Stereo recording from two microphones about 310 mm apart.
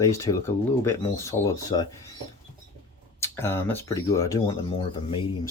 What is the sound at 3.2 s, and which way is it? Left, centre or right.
Speech, centre.